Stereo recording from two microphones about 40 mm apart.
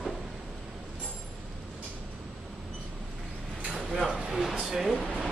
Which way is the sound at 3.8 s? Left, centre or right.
Centre.